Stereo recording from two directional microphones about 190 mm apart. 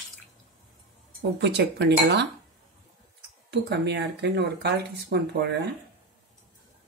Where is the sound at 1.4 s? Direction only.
65° right (ahead or behind).